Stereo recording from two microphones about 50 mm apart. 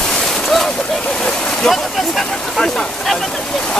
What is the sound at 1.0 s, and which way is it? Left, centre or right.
Vehicle, left.